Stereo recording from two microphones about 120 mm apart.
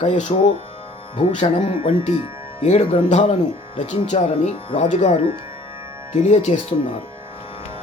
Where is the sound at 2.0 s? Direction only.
65° left (ahead or behind).